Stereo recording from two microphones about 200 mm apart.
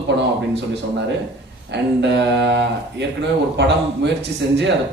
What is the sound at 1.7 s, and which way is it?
Speech, 60° right (ahead or behind).